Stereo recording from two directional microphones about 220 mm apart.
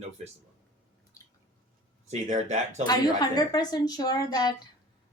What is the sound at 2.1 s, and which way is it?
Speech, 30° right (ahead or behind).